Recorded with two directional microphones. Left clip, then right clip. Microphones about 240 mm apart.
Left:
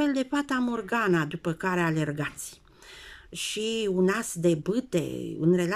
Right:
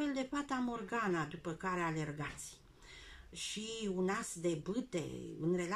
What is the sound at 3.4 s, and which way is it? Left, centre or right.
Speech, left.